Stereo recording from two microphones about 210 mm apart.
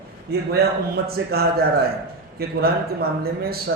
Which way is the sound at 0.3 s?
50° right (ahead or behind).